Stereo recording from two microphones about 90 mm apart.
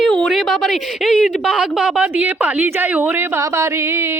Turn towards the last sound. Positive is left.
turn(degrees=-30)  # may be behind; listen again after turning